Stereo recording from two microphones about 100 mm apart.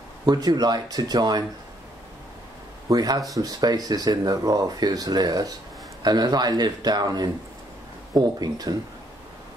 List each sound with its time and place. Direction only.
0.2 s speech: 40° right (ahead or behind)
2.9 s speech: 40° right (ahead or behind)